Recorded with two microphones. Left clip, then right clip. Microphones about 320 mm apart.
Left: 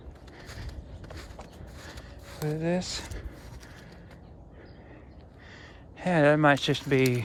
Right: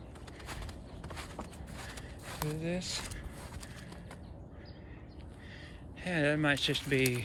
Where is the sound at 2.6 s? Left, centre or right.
Left.